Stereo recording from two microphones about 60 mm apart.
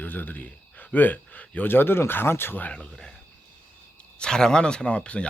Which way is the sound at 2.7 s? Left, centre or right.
Centre.